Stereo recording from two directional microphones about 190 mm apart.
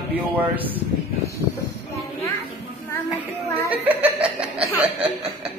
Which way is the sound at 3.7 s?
10° right (ahead or behind).